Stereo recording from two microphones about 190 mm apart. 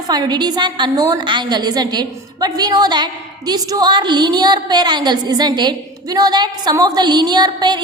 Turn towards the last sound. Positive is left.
turn(degrees=-20)  # may be behind; listen again after turning